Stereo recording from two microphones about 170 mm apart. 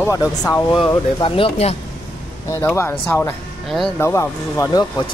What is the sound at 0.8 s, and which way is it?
Speech, 30° left (ahead or behind).